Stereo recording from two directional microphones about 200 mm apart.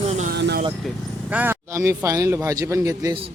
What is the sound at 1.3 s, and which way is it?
A man's voice, 10° right (ahead or behind).